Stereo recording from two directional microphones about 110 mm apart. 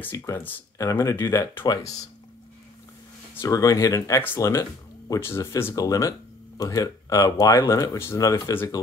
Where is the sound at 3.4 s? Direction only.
30° left (ahead or behind).